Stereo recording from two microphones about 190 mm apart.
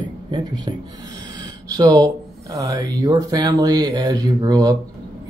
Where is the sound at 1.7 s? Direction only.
20° right (ahead or behind).